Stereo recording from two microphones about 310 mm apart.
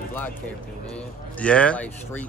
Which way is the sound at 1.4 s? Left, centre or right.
Centre.